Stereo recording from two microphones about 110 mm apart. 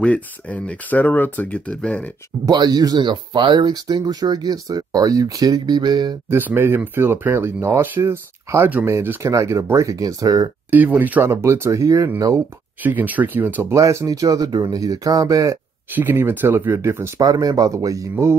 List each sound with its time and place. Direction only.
0.0 s speech: 10° left (ahead or behind)
2.4 s speech: 40° right (ahead or behind)
6.3 s speech: 20° right (ahead or behind)
10.7 s speech: 15° right (ahead or behind)
12.8 s speech: 15° right (ahead or behind)
13.7 s speech: 30° right (ahead or behind)
15.9 s speech: 20° right (ahead or behind)
17.2 s speech: 35° right (ahead or behind)